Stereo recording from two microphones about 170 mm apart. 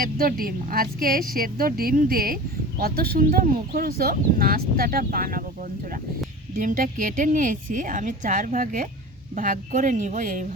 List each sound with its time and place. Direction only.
0.0 s speech: 55° right (ahead or behind)
6.6 s speech: 50° right (ahead or behind)